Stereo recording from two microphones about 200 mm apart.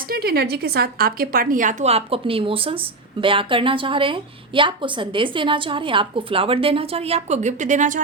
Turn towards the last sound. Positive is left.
turn(degrees=-40)  # may be behind; listen again after turning